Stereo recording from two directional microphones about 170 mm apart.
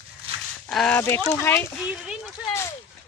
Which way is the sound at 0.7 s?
5° left (ahead or behind).